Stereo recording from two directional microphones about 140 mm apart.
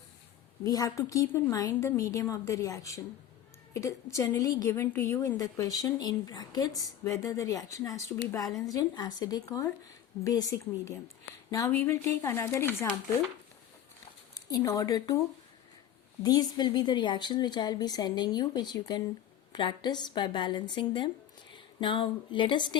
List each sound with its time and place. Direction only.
0.6 s a woman's voice: 25° left (ahead or behind)
11.7 s a woman's voice: 15° left (ahead or behind)
14.3 s a woman's voice: 25° left (ahead or behind)
16.2 s a woman's voice: 30° left (ahead or behind)